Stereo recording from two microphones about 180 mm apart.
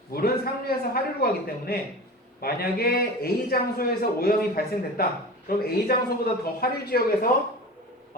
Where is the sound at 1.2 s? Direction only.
55° left (ahead or behind).